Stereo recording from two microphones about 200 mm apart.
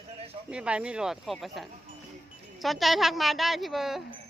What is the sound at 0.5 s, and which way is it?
Speech, 5° right (ahead or behind).